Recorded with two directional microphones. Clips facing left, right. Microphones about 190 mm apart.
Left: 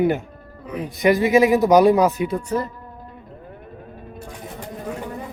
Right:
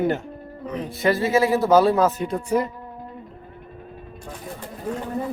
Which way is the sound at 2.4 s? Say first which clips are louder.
Right 2 dB; 10° right (ahead or behind).